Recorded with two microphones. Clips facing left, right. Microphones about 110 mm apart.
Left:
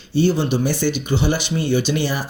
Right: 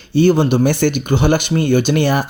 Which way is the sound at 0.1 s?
60° right (ahead or behind).